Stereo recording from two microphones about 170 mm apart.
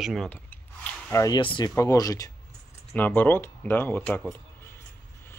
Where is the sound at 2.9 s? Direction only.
10° left (ahead or behind).